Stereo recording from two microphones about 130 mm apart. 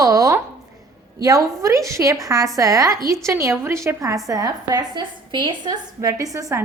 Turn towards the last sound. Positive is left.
turn(degrees=-25)  # may be behind; listen again after turning